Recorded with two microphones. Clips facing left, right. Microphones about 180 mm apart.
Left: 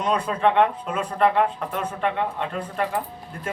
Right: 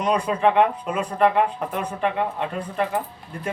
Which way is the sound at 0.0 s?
10° right (ahead or behind).